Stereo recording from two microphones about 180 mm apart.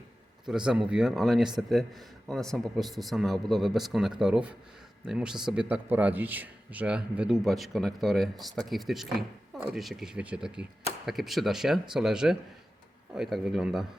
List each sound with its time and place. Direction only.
0.4 s a man's voice: 5° right (ahead or behind)